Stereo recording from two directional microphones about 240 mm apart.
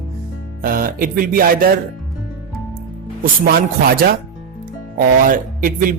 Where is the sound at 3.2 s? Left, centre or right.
Right.